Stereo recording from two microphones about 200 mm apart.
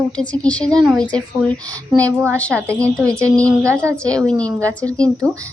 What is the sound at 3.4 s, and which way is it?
Speech, 15° right (ahead or behind).